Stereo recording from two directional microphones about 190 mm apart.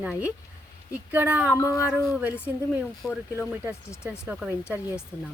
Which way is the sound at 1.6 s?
15° left (ahead or behind).